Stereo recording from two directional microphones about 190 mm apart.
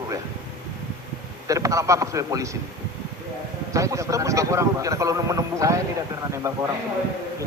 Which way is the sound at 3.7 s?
15° right (ahead or behind).